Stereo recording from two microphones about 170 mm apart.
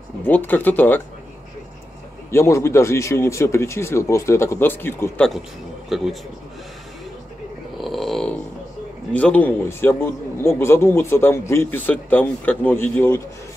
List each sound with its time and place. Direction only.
0.2 s a man's voice: 10° left (ahead or behind)
2.3 s a man's voice: 15° left (ahead or behind); by 6.1 s centre (ahead or behind)
7.7 s a sound: centre (ahead or behind)
9.1 s a man's voice: 10° left (ahead or behind)